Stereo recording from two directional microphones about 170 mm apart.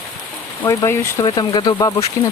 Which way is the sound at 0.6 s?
20° left (ahead or behind).